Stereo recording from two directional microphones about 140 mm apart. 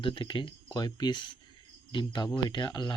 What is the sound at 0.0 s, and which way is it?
Speech, 35° left (ahead or behind).